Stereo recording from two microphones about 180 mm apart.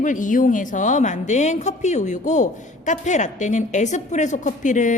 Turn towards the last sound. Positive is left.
turn(degrees=45)  # may be behind; listen again after turning